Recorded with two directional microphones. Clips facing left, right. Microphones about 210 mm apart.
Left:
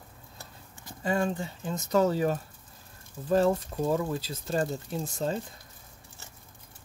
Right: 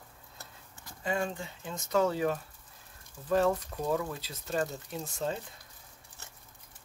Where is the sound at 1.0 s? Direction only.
40° left (ahead or behind).